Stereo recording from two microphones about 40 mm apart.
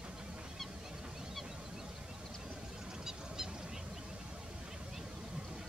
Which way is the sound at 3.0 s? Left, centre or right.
Centre.